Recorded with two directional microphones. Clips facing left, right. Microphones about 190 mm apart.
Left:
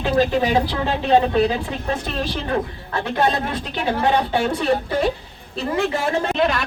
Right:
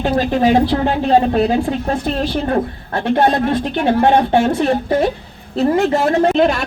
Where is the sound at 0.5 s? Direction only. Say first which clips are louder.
Right 6 dB; 50° right (ahead or behind).